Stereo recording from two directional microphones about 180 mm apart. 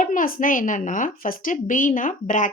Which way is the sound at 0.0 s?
50° left (ahead or behind).